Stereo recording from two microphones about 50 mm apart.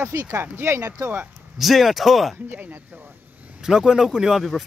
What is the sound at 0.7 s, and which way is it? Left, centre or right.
Speech, right.